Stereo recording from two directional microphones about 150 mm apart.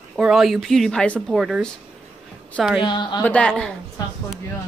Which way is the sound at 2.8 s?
30° left (ahead or behind).